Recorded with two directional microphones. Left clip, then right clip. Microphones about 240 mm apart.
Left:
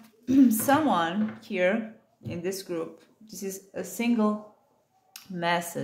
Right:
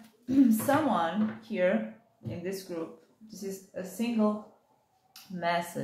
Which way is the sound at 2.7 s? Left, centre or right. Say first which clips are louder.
Left 4 dB; left.